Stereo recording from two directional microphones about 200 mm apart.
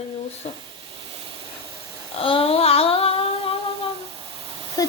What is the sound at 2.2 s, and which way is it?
Humming, 30° left (ahead or behind).